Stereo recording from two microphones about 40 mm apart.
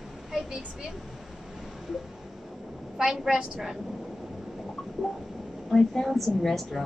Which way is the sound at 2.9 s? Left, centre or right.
Centre.